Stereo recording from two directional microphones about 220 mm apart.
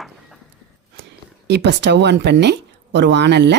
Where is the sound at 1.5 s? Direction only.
50° right (ahead or behind).